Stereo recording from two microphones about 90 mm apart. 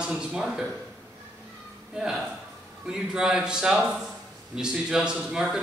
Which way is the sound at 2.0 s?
5° right (ahead or behind).